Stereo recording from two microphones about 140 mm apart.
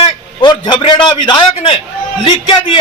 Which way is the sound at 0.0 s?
35° left (ahead or behind).